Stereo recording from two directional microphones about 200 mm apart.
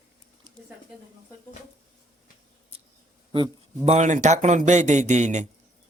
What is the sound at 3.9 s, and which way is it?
Speech, 35° right (ahead or behind).